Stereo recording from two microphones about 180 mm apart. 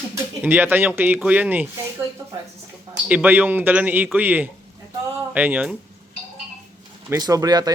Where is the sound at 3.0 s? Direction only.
10° right (ahead or behind).